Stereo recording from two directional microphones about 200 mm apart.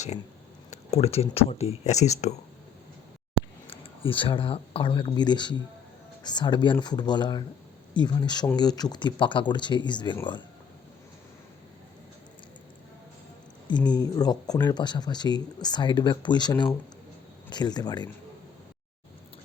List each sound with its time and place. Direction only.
0.7 s speech: 30° left (ahead or behind)
3.7 s speech: 25° left (ahead or behind)
13.7 s speech: 20° left (ahead or behind)